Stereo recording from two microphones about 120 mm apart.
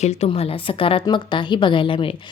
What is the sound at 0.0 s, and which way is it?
A woman's voice, 60° left (ahead or behind).